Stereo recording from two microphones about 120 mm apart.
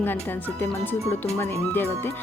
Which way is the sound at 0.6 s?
15° left (ahead or behind).